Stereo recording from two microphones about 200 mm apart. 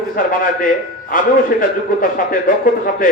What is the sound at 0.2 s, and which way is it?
A man's voice, 45° left (ahead or behind).